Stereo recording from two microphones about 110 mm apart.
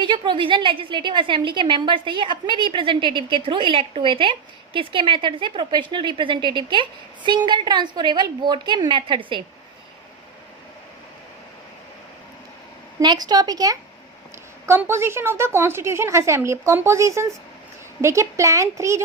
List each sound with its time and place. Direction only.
0.0 s a woman's voice: 45° right (ahead or behind)
13.0 s speech: 40° right (ahead or behind)
14.7 s a woman's voice: 25° right (ahead or behind)